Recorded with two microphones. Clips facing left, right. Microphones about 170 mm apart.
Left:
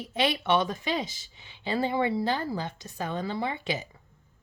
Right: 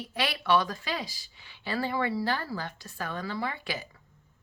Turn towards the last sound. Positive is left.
turn(degrees=20)  # may be behind; listen again after turning